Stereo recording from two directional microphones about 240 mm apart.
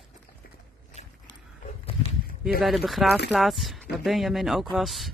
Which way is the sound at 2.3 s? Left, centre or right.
Left.